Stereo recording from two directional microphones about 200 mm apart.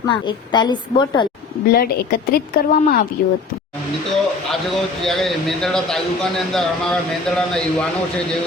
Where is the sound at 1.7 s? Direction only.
50° left (ahead or behind).